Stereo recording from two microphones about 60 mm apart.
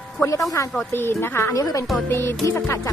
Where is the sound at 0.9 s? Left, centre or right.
Left.